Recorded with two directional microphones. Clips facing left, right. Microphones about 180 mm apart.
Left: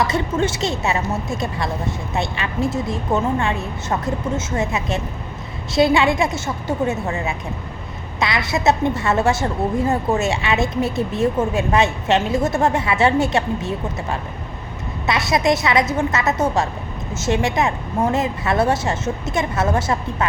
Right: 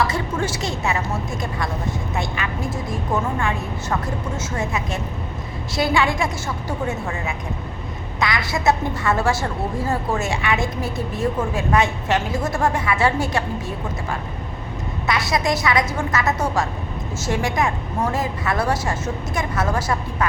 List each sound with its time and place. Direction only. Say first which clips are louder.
0.0 s a woman's voice: left 3 dB; 20° left (ahead or behind)